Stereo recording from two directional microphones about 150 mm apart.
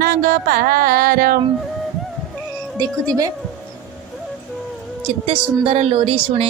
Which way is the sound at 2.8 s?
25° right (ahead or behind).